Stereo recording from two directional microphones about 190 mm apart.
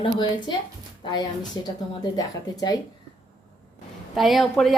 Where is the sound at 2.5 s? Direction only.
20° left (ahead or behind).